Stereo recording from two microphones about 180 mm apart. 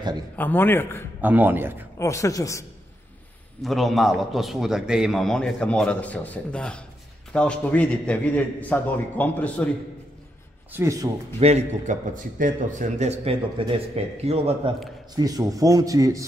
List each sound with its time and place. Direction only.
0.4 s a man's voice: 10° left (ahead or behind)
1.2 s a man's voice: 10° right (ahead or behind)
2.0 s a man's voice: 15° left (ahead or behind)
3.6 s a man's voice: centre (ahead or behind)
10.7 s a man's voice: 15° right (ahead or behind)
11.3 s a man's voice: 35° right (ahead or behind)
15.1 s speech: 20° right (ahead or behind)